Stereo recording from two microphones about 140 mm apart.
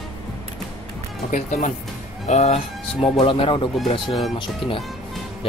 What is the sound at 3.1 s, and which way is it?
Speech, 35° left (ahead or behind).